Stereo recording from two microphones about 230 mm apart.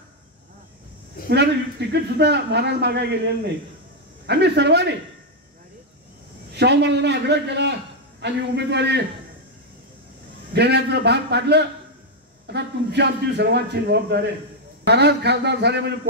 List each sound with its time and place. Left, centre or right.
1.3 s a man's voice: right
6.5 s a man's voice: right
10.5 s a man's voice: right